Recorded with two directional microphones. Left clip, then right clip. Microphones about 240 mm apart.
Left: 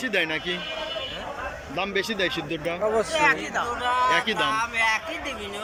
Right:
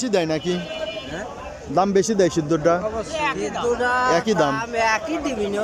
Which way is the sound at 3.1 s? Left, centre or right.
Centre.